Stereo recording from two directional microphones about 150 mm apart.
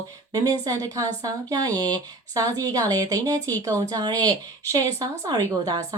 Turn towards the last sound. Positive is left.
turn(degrees=-25)  # may be behind; listen again after turning